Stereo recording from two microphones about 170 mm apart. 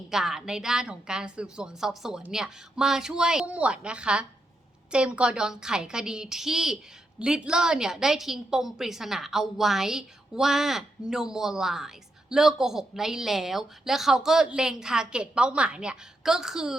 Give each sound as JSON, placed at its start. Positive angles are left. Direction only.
{"t": 0.1, "sound": "a woman's voice", "side_deg": -5}